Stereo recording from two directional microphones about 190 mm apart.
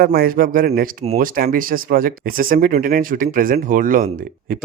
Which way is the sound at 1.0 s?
35° right (ahead or behind).